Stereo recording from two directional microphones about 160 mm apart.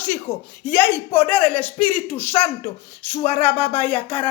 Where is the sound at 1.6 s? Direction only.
10° left (ahead or behind).